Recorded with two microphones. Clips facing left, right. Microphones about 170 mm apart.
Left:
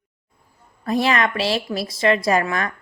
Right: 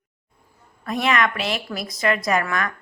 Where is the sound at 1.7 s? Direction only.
30° left (ahead or behind).